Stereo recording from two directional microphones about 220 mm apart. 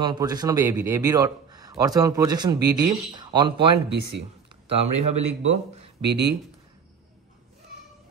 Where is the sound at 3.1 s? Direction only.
20° right (ahead or behind).